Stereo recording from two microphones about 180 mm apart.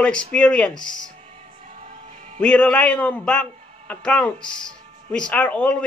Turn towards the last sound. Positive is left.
turn(degrees=5)  # may be behind; listen again after turning